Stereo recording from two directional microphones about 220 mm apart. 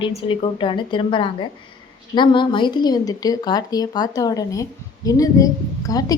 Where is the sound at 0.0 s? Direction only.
20° left (ahead or behind).